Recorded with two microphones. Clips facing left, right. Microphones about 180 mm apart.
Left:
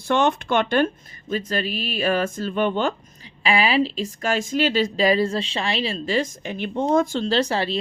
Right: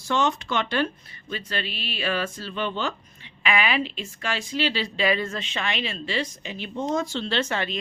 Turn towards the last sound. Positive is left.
turn(degrees=35)  # may be behind; listen again after turning